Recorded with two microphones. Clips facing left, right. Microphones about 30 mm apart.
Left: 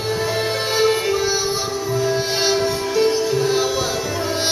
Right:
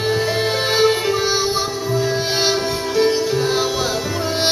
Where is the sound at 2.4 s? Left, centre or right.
Centre.